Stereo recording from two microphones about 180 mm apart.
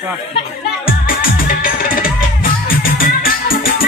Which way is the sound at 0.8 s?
50° left (ahead or behind).